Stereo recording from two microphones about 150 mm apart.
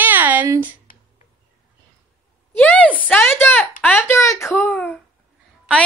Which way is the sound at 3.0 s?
15° left (ahead or behind).